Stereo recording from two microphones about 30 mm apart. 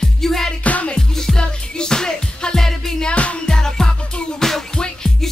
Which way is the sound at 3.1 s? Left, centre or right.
Left.